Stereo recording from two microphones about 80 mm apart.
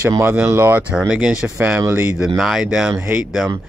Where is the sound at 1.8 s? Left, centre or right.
Right.